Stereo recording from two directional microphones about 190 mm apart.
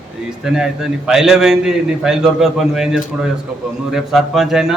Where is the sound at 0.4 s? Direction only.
5° right (ahead or behind).